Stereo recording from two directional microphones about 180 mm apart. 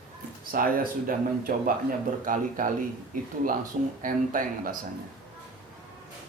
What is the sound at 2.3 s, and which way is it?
Speech, 50° right (ahead or behind).